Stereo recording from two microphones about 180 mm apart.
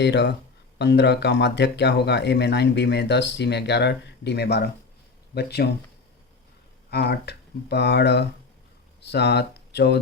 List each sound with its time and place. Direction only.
0.0 s speech: 70° left (ahead or behind)
6.9 s speech: 65° left (ahead or behind)